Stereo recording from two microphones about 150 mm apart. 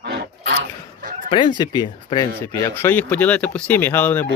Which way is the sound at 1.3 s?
30° left (ahead or behind).